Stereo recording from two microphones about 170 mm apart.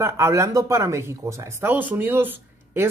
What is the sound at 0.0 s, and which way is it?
Speech, 15° right (ahead or behind).